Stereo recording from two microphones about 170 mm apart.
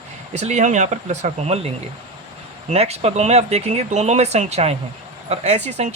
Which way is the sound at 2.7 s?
35° right (ahead or behind).